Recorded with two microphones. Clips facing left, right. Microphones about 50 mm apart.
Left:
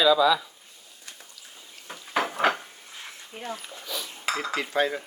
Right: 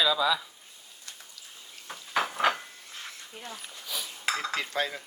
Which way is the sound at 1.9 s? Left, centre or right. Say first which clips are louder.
Left 2 dB; left.